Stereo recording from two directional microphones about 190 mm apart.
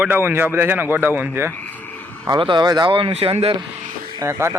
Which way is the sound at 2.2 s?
25° right (ahead or behind).